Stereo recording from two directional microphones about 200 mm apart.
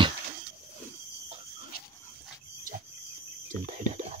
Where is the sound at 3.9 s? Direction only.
35° right (ahead or behind).